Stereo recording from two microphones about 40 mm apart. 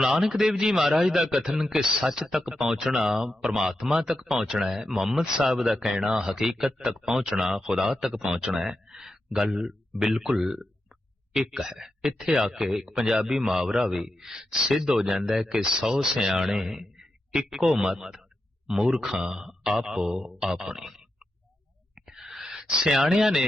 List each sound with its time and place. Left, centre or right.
0.0 s a man's voice: centre
3.8 s a man's voice: right
21.9 s a sound: centre